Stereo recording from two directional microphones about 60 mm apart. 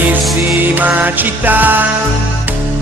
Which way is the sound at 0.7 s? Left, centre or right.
Right.